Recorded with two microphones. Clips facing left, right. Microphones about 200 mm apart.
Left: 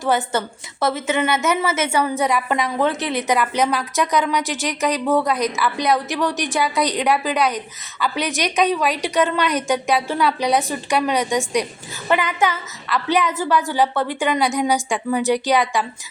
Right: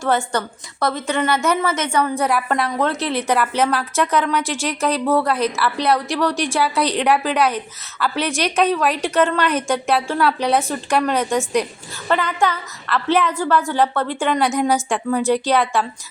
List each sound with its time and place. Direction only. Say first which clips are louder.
0.0 s a woman's voice: even; 20° left (ahead or behind)
0.9 s a woman's voice: even; 5° left (ahead or behind)
6.7 s a woman's voice: right 1 dB; 15° left (ahead or behind)
7.3 s a woman's voice: right 1 dB; 5° right (ahead or behind)
12.0 s a woman's voice: even; 10° left (ahead or behind)